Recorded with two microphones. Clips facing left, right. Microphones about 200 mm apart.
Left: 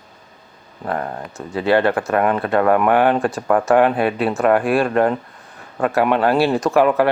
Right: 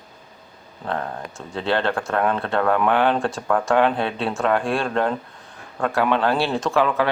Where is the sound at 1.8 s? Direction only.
5° left (ahead or behind).